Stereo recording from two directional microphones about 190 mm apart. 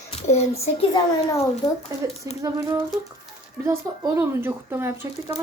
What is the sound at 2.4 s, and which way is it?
A woman's voice, 15° right (ahead or behind).